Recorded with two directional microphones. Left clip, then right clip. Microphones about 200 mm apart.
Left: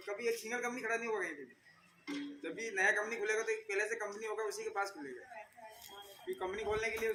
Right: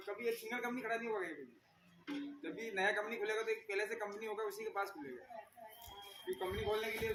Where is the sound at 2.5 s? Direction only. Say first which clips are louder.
Left 4 dB; 15° right (ahead or behind).